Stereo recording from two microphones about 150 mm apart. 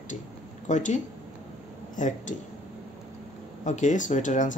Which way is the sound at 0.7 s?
55° left (ahead or behind).